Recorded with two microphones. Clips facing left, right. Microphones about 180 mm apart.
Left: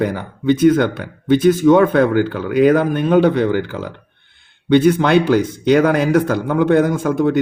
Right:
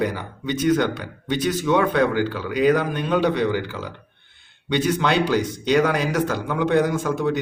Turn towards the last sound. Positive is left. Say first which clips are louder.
# left 6 dB
turn(degrees=50)  # may be behind; listen again after turning